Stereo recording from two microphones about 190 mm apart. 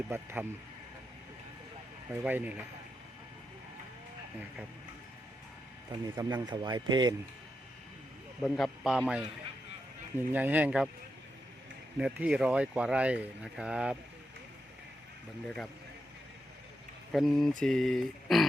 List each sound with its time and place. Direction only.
0.1 s speech: 10° right (ahead or behind)
2.2 s speech: 10° right (ahead or behind)
6.1 s speech: 20° right (ahead or behind)
8.4 s speech: centre (ahead or behind)
11.9 s speech: 5° right (ahead or behind)
15.4 s speech: 5° left (ahead or behind)
17.1 s speech: centre (ahead or behind)